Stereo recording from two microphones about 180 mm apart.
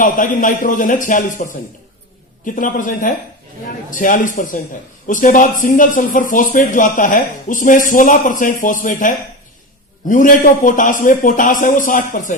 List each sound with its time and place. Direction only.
0.0 s speech: 45° left (ahead or behind)